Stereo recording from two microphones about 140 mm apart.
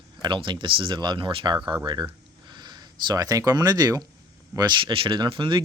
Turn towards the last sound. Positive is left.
turn(degrees=-35)  # may be behind; listen again after turning